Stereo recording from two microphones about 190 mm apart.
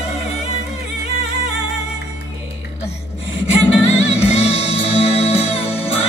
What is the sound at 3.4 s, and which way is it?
Music, 35° left (ahead or behind).